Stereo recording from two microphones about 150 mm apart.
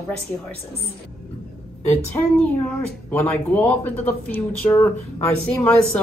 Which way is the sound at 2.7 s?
10° left (ahead or behind).